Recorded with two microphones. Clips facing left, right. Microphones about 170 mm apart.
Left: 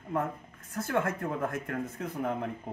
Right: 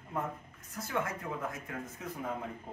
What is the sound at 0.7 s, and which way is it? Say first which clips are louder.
Speech: left 6 dB; 60° left (ahead or behind).